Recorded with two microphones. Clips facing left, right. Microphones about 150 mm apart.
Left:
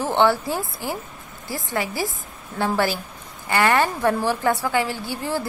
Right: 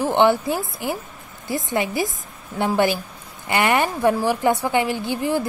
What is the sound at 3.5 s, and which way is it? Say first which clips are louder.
A woman's voice: even; 15° right (ahead or behind).